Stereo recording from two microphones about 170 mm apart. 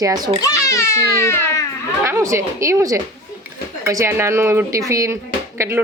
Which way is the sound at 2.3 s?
15° right (ahead or behind).